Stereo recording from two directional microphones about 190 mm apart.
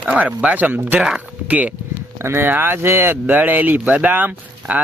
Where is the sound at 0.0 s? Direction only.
5° right (ahead or behind).